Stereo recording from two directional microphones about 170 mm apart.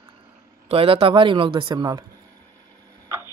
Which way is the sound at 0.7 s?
35° right (ahead or behind).